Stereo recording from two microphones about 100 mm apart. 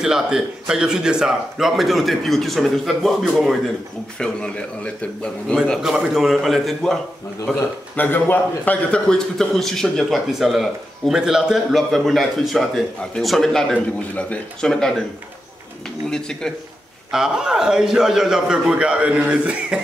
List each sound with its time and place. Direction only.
0.0 s a man's voice: 5° right (ahead or behind)
4.2 s speech: 10° left (ahead or behind)
5.8 s a man's voice: 5° right (ahead or behind)
7.9 s a man's voice: 20° left (ahead or behind)
16.1 s speech: 5° left (ahead or behind)
17.1 s a man's voice: 5° right (ahead or behind)